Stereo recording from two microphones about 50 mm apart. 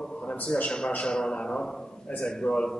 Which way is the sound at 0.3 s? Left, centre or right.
Left.